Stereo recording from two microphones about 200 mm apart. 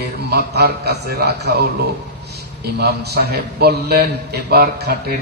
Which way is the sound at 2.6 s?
55° right (ahead or behind).